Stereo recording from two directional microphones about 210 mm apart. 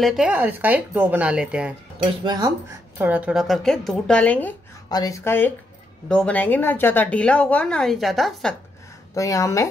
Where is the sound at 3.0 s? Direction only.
5° right (ahead or behind).